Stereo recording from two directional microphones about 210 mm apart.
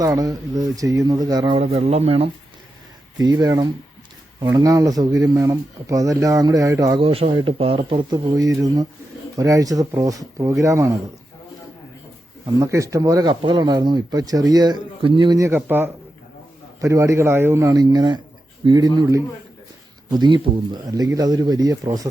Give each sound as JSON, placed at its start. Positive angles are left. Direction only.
{"t": 0.0, "sound": "speech", "side_deg": -15}
{"t": 3.2, "sound": "speech", "side_deg": -20}
{"t": 7.0, "sound": "speech", "side_deg": -25}
{"t": 12.5, "sound": "speech", "side_deg": -15}